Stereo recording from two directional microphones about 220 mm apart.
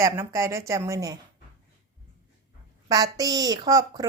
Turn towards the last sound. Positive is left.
turn(degrees=-15)  # may be behind; listen again after turning